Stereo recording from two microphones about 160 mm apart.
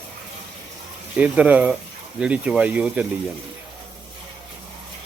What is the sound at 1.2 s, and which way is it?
Speech, 10° right (ahead or behind).